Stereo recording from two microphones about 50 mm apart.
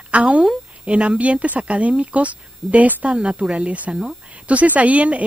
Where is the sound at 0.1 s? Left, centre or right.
Right.